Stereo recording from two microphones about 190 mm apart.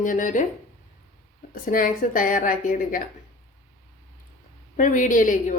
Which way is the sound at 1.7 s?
45° left (ahead or behind).